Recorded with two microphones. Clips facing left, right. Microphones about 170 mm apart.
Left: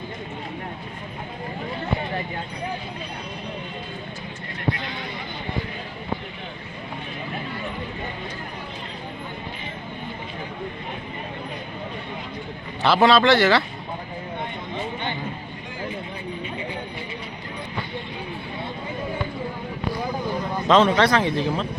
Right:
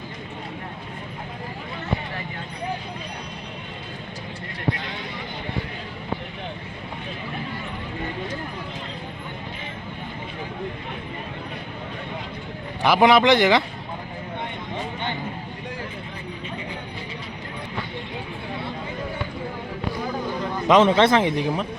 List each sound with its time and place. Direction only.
12.8 s speech: 15° right (ahead or behind)
20.7 s speech: 20° right (ahead or behind)